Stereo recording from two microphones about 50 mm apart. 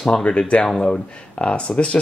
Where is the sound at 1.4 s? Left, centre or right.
Left.